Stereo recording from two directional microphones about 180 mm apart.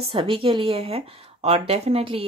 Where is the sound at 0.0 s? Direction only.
30° right (ahead or behind).